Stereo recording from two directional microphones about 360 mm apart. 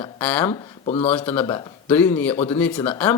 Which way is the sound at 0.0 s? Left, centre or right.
Centre.